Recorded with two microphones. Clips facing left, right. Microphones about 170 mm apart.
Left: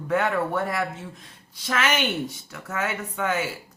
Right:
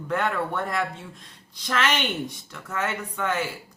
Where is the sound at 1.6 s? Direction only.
10° left (ahead or behind).